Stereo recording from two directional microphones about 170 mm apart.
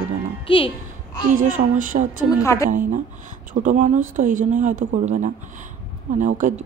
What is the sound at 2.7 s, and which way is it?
Speech, 50° right (ahead or behind).